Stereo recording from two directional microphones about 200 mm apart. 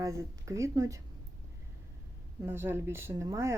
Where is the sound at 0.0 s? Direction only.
15° right (ahead or behind).